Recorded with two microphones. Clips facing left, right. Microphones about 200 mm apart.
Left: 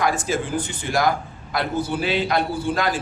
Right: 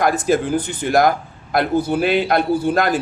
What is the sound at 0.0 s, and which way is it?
A man's voice, 60° right (ahead or behind).